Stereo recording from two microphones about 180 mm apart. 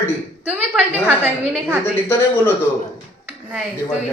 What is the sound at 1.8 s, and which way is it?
Speech, 15° left (ahead or behind).